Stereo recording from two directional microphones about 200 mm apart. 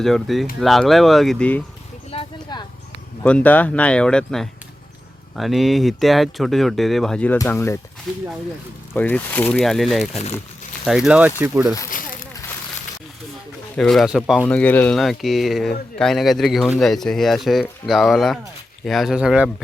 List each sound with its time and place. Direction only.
0.0 s speech: centre (ahead or behind)
2.0 s a sound: 25° left (ahead or behind)
3.2 s speech: 5° left (ahead or behind)
8.1 s speech: centre (ahead or behind)
11.9 s a sound: 45° left (ahead or behind)
13.7 s speech: centre (ahead or behind)
14.4 s speech: 10° left (ahead or behind)